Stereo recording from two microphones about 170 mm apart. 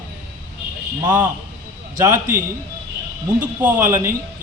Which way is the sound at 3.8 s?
15° right (ahead or behind).